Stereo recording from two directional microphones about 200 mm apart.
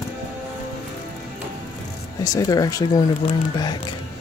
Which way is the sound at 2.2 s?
20° left (ahead or behind).